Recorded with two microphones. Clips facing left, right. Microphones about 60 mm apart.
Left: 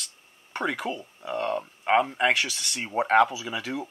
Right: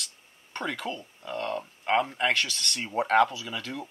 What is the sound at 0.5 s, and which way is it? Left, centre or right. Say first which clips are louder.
Speech: left 4 dB; centre.